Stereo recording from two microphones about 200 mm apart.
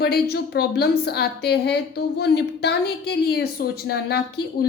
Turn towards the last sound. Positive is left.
turn(degrees=55)  # may be behind; listen again after turning